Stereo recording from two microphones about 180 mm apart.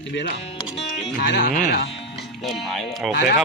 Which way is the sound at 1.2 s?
70° left (ahead or behind).